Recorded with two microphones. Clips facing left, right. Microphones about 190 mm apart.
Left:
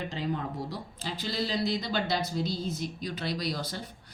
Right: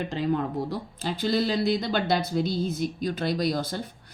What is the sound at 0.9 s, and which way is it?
Speech, 55° right (ahead or behind).